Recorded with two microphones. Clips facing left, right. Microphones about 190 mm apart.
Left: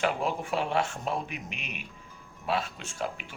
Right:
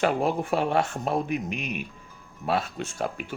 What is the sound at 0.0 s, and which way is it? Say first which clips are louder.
Speech: right 5 dB; 45° right (ahead or behind).